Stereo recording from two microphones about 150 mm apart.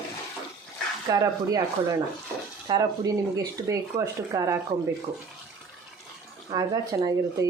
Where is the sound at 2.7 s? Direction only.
30° right (ahead or behind).